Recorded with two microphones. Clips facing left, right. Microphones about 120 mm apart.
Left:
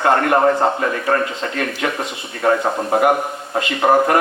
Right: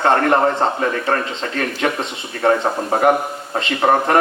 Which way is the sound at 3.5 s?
30° right (ahead or behind).